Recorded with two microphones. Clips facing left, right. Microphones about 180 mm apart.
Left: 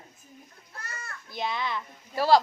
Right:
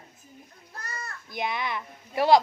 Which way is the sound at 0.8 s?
35° right (ahead or behind).